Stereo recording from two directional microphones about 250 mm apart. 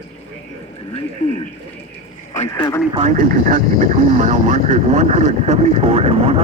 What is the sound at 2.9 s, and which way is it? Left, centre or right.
Speech, right.